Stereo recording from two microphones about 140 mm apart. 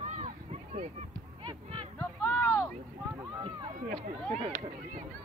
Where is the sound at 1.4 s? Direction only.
35° right (ahead or behind).